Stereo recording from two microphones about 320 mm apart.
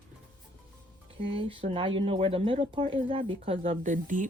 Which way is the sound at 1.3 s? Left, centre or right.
Centre.